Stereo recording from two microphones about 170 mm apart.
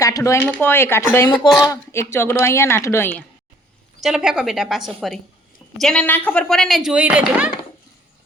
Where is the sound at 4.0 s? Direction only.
5° right (ahead or behind).